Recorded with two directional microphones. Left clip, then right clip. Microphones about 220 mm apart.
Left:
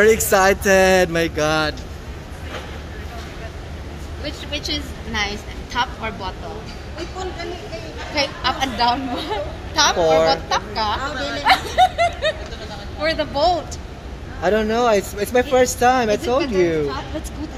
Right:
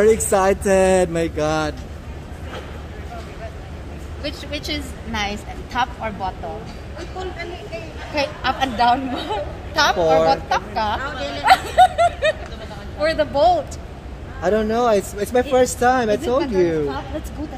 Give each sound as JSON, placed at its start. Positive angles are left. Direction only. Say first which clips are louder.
{"t": 0.0, "sound": "speech", "louder": "left 1 dB", "side_deg": -10}
{"t": 4.6, "sound": "a woman's voice", "louder": "left 1 dB", "side_deg": -40}
{"t": 8.1, "sound": "a woman's voice", "louder": "even", "side_deg": -45}
{"t": 9.9, "sound": "speech", "louder": "even", "side_deg": -10}
{"t": 10.3, "sound": "a woman's voice", "louder": "right 1 dB", "side_deg": -45}
{"t": 11.4, "sound": "snicker", "louder": "right 2 dB", "side_deg": -45}
{"t": 13.0, "sound": "a woman's voice", "louder": "right 2 dB", "side_deg": -50}
{"t": 14.4, "sound": "speech", "louder": "left 1 dB", "side_deg": -10}